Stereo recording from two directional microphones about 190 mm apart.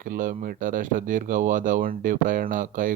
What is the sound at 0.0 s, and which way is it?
Speech, 45° right (ahead or behind).